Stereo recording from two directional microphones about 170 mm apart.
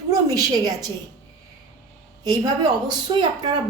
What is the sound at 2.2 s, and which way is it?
A woman's voice, 25° right (ahead or behind).